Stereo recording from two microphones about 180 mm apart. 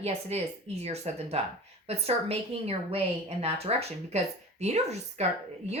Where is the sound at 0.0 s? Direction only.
35° right (ahead or behind).